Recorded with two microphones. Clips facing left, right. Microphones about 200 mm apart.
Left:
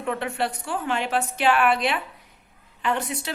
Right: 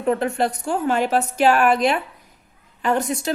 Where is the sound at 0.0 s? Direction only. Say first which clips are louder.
Right 6 dB; 40° right (ahead or behind).